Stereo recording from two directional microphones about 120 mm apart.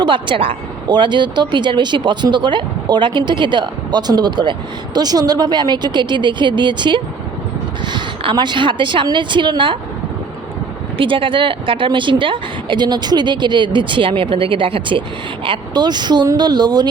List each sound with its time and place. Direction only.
0.0 s speech: 45° right (ahead or behind)
10.9 s speech: 45° right (ahead or behind)